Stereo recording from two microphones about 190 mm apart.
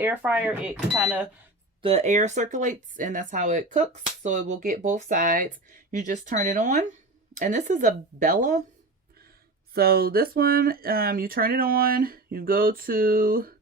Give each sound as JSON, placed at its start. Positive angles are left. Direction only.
{"t": 0.0, "sound": "speech", "side_deg": -10}
{"t": 1.8, "sound": "speech", "side_deg": -30}
{"t": 9.7, "sound": "speech", "side_deg": -55}